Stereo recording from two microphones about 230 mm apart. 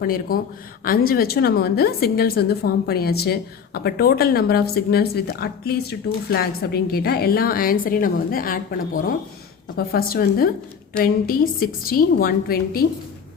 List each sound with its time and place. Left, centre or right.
0.0 s a woman's voice: left
9.7 s a woman's voice: left